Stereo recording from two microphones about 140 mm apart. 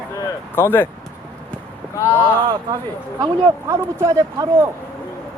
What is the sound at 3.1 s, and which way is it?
Speech, 20° right (ahead or behind).